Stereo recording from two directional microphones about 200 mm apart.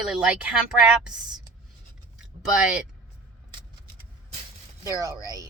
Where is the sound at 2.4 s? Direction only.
5° right (ahead or behind).